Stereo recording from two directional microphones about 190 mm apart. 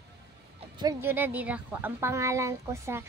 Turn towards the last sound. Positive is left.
turn(degrees=-15)  # may be behind; listen again after turning